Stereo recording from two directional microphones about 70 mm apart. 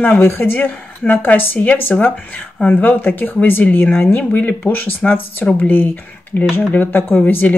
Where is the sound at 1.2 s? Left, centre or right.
Left.